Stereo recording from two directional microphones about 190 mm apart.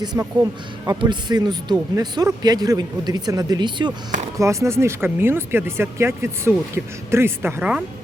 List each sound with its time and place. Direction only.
0.0 s a man's voice: 20° right (ahead or behind)